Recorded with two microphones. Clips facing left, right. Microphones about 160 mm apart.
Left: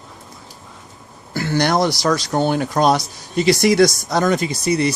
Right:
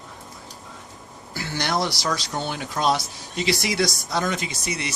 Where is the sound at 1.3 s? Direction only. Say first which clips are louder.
Left 8 dB; 55° left (ahead or behind); by 4.9 s 35° left (ahead or behind).